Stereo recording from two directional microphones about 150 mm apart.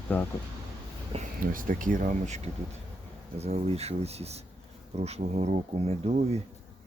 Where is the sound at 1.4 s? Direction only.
65° right (ahead or behind); by 6.4 s 45° right (ahead or behind).